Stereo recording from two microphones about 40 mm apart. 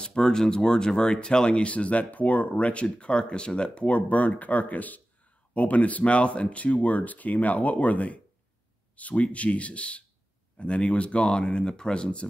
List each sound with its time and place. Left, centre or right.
0.0 s speech: centre